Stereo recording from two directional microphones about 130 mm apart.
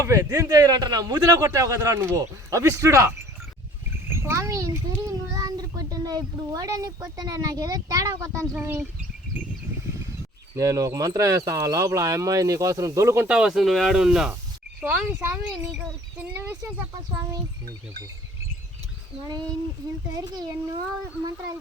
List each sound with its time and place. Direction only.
0.0 s a man's voice: 25° right (ahead or behind)
4.1 s a child's voice: 20° right (ahead or behind)
10.5 s a man's voice: 25° right (ahead or behind)
13.2 s speech: 5° right (ahead or behind)
20.1 s a child's voice: 30° right (ahead or behind)